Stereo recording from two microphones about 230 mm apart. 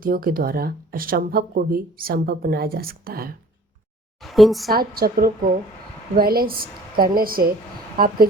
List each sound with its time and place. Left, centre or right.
0.0 s speech: right
4.2 s speech: centre
4.7 s speech: right